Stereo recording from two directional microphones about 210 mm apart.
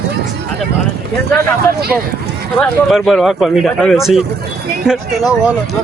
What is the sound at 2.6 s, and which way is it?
Speech, centre (ahead or behind).